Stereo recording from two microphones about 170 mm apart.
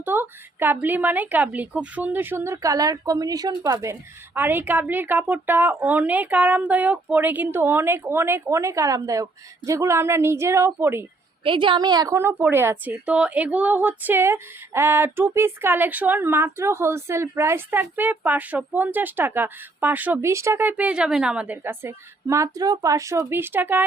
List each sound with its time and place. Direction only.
0.0 s a woman's voice: 10° right (ahead or behind)
11.4 s a woman's voice: 30° right (ahead or behind); by 23.8 s 10° right (ahead or behind)